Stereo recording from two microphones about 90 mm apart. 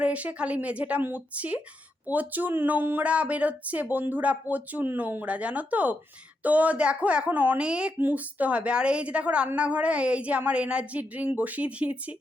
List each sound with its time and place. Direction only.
0.0 s speech: 15° right (ahead or behind)